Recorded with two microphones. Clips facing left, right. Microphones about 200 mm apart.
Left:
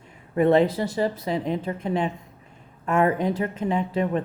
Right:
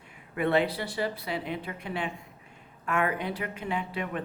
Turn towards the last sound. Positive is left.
turn(degrees=40)  # may be behind; listen again after turning